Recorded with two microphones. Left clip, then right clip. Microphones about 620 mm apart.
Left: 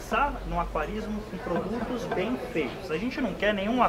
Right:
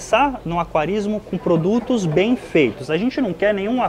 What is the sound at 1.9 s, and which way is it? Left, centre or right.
A man's voice, right.